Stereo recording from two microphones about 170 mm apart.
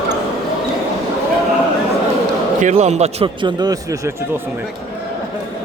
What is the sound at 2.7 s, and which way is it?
Speech, 40° right (ahead or behind).